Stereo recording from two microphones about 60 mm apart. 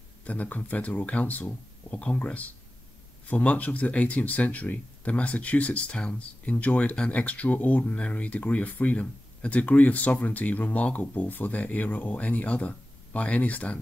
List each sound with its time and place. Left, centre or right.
0.2 s speech: left